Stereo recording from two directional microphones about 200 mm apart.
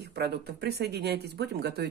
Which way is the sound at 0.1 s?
55° right (ahead or behind).